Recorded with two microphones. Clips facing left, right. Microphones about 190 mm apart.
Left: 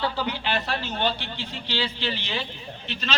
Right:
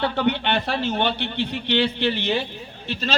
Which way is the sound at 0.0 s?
65° right (ahead or behind).